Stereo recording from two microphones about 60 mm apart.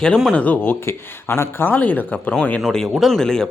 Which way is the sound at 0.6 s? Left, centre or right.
Left.